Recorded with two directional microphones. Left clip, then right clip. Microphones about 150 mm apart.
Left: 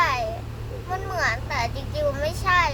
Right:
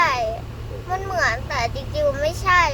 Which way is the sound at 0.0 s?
25° right (ahead or behind).